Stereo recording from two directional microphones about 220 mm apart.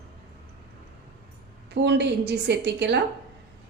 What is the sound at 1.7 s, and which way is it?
A woman's voice, 50° right (ahead or behind).